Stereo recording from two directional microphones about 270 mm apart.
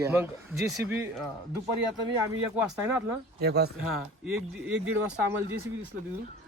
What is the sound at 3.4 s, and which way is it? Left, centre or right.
Speech, right.